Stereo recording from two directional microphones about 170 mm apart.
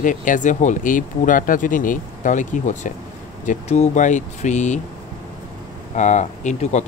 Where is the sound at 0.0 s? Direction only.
50° left (ahead or behind).